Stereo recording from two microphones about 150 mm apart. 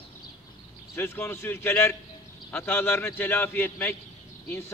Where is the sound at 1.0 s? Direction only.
15° left (ahead or behind).